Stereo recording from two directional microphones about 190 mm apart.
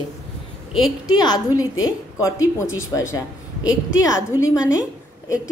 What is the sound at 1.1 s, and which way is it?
A woman's voice, 20° left (ahead or behind).